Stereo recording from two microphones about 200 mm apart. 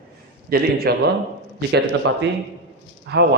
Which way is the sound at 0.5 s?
50° right (ahead or behind).